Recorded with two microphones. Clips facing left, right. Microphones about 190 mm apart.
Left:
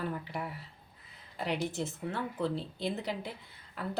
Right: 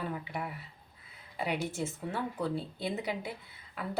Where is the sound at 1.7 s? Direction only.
10° right (ahead or behind).